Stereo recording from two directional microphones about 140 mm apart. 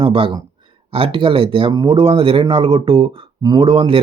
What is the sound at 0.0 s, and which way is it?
Speech, 40° right (ahead or behind).